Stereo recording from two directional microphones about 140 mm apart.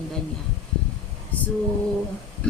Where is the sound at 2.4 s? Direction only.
5° left (ahead or behind).